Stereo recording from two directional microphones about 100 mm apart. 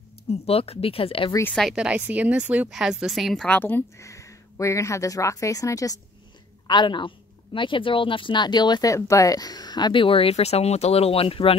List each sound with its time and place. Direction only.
0.3 s speech: 85° left
1.5 s a woman's voice: 5° left (ahead or behind)
1.8 s speech: 15° right (ahead or behind)
2.7 s a woman's voice: 5° right (ahead or behind)
3.4 s speech: 20° left (ahead or behind)
4.0 s speech: 30° left (ahead or behind)
6.7 s speech: 50° left (ahead or behind)
8.9 s speech: 30° left (ahead or behind)
10.0 s speech: 70° left (ahead or behind)